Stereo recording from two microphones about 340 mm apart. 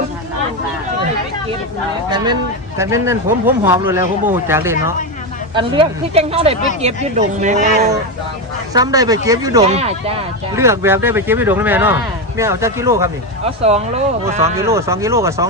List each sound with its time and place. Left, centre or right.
2.0 s speech: centre
8.7 s speech: centre
14.5 s speech: centre